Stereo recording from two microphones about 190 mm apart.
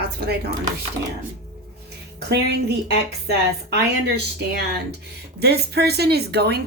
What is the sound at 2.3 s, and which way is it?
Speech, 60° right (ahead or behind).